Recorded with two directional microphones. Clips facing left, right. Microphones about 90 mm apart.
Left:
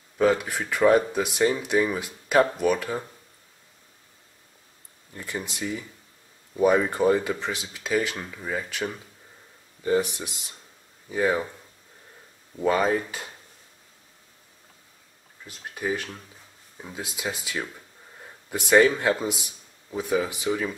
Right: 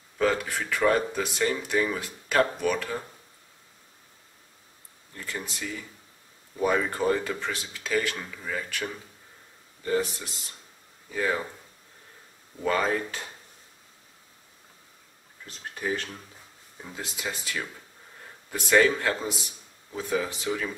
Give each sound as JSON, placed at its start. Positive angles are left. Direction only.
{"t": 0.2, "sound": "speech", "side_deg": 15}
{"t": 5.1, "sound": "speech", "side_deg": 15}
{"t": 12.6, "sound": "speech", "side_deg": 15}
{"t": 15.4, "sound": "speech", "side_deg": 10}